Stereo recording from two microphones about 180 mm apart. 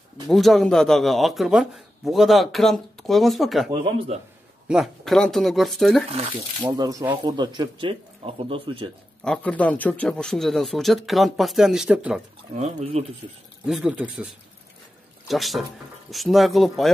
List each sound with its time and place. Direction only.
0.3 s speech: centre (ahead or behind)
3.7 s speech: 30° right (ahead or behind)
4.6 s speech: centre (ahead or behind)
6.0 s speech: 35° right (ahead or behind)
6.7 s speech: 20° right (ahead or behind)
9.2 s speech: 5° left (ahead or behind)
12.5 s speech: 40° right (ahead or behind)
13.7 s speech: 5° right (ahead or behind)